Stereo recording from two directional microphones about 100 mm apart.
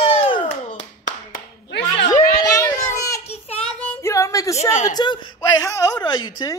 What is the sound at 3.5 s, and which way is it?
Child singing, 10° left (ahead or behind).